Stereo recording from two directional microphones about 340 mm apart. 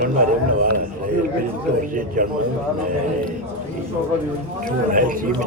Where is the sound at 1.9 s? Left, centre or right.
Right.